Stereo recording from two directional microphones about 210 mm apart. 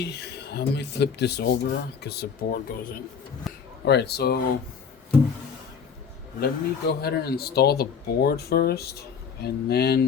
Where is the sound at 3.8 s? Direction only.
50° left (ahead or behind).